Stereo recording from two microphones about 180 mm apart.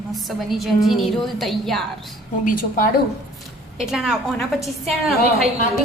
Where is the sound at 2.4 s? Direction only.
50° left (ahead or behind).